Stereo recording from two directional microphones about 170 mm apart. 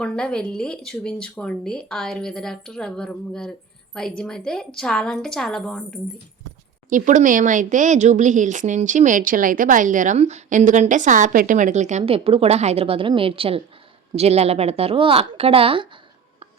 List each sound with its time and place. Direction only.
0.0 s speech: 5° left (ahead or behind)
6.9 s speech: 50° right (ahead or behind); by 16.0 s 30° right (ahead or behind)